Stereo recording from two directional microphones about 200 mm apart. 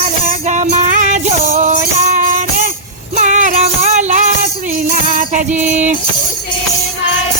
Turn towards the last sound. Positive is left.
turn(degrees=-5)  # may be behind; listen again after turning